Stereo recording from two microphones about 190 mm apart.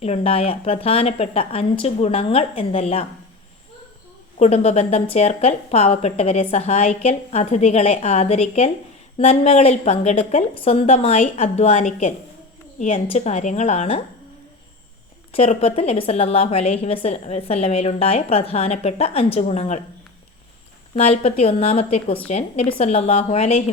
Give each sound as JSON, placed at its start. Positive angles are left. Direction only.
{"t": 0.0, "sound": "a woman's voice", "side_deg": 30}
{"t": 4.4, "sound": "a woman's voice", "side_deg": 35}
{"t": 15.3, "sound": "a woman's voice", "side_deg": 30}
{"t": 20.9, "sound": "a woman's voice", "side_deg": 30}